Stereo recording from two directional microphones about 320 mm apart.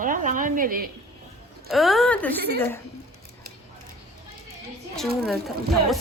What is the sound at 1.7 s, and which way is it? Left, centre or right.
A woman's voice, centre.